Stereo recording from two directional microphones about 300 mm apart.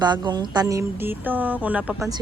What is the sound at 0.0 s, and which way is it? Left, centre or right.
Speech, centre.